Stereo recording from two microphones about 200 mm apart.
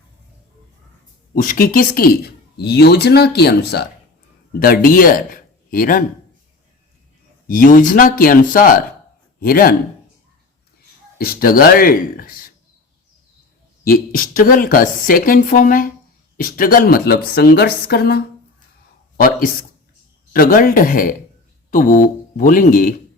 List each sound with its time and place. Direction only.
1.4 s a woman's voice: 40° left (ahead or behind)
7.4 s a woman's voice: 40° left (ahead or behind)
11.2 s a woman's voice: 50° left (ahead or behind)
13.8 s a woman's voice: 45° left (ahead or behind)